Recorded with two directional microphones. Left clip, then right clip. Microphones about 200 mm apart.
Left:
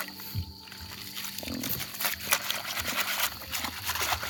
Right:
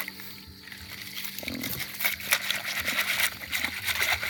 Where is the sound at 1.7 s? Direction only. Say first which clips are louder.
Right 5 dB; 30° left (ahead or behind).